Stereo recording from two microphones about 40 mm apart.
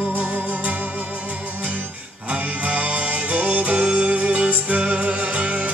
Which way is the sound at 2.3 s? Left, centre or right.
Right.